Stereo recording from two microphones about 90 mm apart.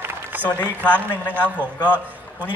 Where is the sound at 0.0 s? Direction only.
20° right (ahead or behind).